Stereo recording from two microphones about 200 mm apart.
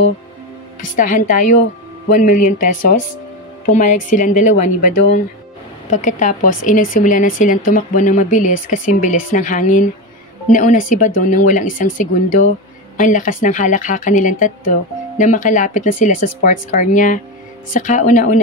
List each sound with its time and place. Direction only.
0.9 s speech: 40° left (ahead or behind)